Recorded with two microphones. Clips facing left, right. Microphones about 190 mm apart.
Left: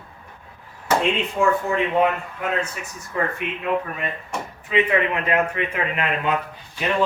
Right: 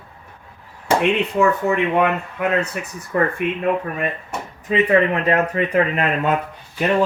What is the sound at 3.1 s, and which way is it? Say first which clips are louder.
Speech: right 6 dB; 55° right (ahead or behind).